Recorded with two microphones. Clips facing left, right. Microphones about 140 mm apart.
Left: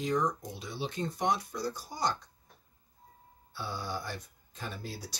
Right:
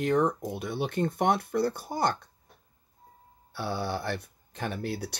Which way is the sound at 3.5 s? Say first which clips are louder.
Right 6 dB; 65° right (ahead or behind).